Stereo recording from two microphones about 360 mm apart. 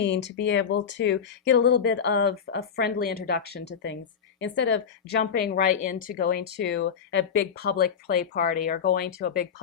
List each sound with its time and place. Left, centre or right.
0.0 s a woman's voice: left